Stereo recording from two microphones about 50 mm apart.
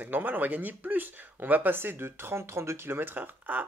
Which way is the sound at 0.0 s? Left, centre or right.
Right.